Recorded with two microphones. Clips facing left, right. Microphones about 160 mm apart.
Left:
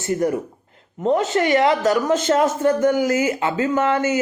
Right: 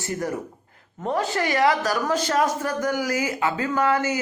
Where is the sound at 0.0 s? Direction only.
20° left (ahead or behind).